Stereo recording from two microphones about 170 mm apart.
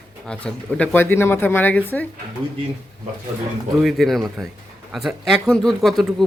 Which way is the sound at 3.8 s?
Centre (ahead or behind).